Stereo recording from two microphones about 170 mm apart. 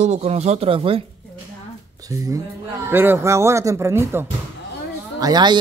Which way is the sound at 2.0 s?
20° right (ahead or behind).